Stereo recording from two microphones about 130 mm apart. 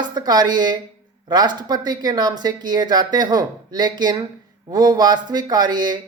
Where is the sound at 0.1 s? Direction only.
30° right (ahead or behind).